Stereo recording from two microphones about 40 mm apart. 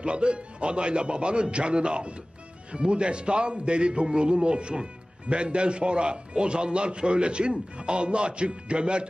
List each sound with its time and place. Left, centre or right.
0.0 s a man's voice: right